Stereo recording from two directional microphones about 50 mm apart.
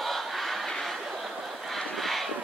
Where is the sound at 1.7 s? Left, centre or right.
Centre.